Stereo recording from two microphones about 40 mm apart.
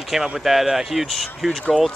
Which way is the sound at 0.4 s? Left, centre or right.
Centre.